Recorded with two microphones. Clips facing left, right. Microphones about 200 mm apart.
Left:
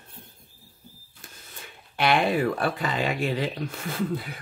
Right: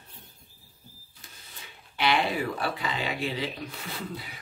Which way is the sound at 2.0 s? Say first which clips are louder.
Left 4 dB; 50° left (ahead or behind).